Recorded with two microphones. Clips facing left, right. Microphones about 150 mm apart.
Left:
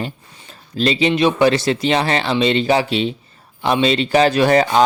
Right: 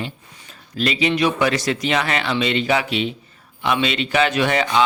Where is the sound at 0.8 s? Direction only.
30° left (ahead or behind).